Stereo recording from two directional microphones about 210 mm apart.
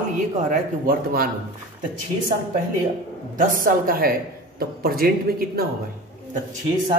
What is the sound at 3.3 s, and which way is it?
Speech, 40° right (ahead or behind).